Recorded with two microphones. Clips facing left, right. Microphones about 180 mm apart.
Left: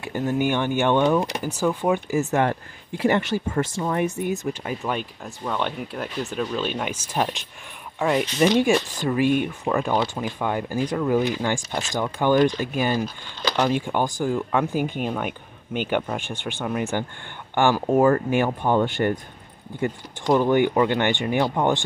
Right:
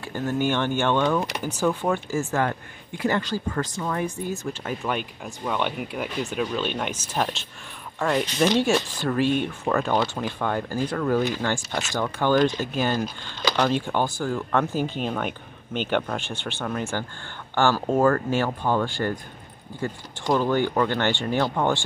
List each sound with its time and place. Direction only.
0.0 s speech: 15° left (ahead or behind)
2.5 s speech: 30° left (ahead or behind)
4.5 s speech: 5° left (ahead or behind)
5.2 s speech: 5° right (ahead or behind); by 21.8 s 15° left (ahead or behind)